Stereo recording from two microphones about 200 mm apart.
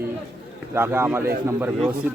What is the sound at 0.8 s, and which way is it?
Speech, 10° right (ahead or behind).